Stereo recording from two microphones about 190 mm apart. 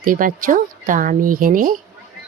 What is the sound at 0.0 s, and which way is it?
Speech, 45° right (ahead or behind).